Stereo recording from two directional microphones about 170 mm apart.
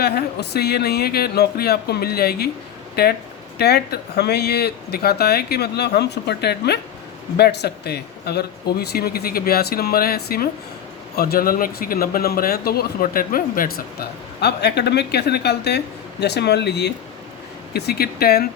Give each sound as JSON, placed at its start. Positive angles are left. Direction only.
{"t": 0.0, "sound": "speech", "side_deg": 70}
{"t": 17.7, "sound": "speech", "side_deg": 70}